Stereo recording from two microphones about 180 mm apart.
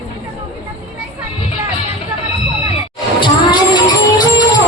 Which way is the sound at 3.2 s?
25° left (ahead or behind).